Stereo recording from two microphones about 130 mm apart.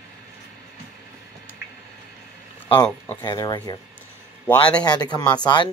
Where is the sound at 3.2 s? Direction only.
35° left (ahead or behind).